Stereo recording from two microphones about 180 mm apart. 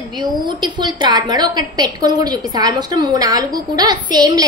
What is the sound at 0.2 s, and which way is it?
A woman's voice, 25° right (ahead or behind).